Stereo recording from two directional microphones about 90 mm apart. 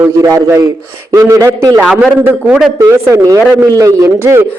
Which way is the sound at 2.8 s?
30° right (ahead or behind).